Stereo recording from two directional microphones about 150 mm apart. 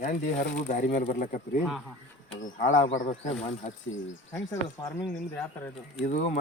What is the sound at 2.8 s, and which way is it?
Speech, 50° left (ahead or behind).